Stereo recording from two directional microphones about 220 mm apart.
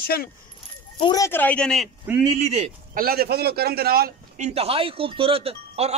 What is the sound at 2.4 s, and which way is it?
A man's voice, 30° right (ahead or behind).